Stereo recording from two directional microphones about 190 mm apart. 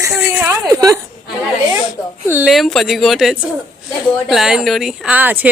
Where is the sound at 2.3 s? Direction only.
5° right (ahead or behind).